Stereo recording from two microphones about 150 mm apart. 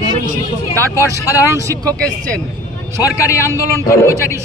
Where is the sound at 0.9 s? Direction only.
20° left (ahead or behind).